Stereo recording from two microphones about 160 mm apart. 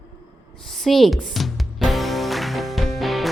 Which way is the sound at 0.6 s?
Centre (ahead or behind).